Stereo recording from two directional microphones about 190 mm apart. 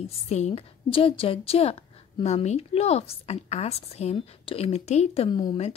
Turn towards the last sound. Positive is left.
turn(degrees=25)  # may be behind; listen again after turning